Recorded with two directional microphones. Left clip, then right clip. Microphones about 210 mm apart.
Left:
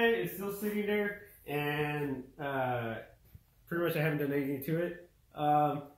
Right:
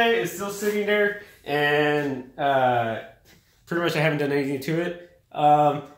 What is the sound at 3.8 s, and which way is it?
Speech, 55° right (ahead or behind).